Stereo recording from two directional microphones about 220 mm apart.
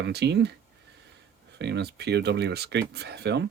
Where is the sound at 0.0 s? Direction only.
50° right (ahead or behind).